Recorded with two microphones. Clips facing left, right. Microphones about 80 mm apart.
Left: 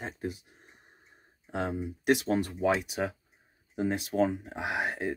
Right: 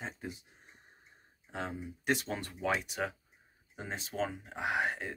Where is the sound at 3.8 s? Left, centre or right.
Left.